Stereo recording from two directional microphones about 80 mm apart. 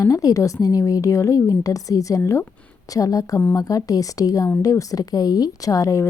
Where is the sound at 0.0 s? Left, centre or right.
Left.